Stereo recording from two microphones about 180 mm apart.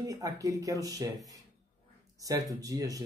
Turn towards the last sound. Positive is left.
turn(degrees=-20)  # may be behind; listen again after turning